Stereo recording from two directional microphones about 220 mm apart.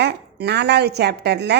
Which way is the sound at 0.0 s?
50° right (ahead or behind).